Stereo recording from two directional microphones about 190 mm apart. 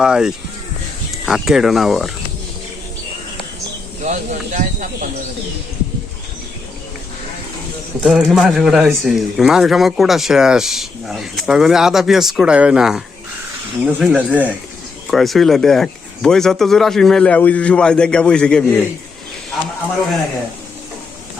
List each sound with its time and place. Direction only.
0.0 s speech: 5° right (ahead or behind)
4.0 s speech: 40° right (ahead or behind)
8.0 s speech: 5° right (ahead or behind)